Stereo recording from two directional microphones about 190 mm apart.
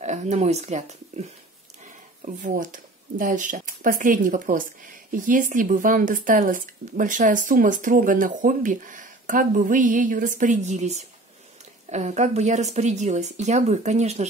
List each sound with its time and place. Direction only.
0.0 s a woman's voice: 40° right (ahead or behind)